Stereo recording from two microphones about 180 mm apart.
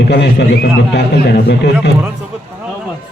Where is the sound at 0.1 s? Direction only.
70° left (ahead or behind).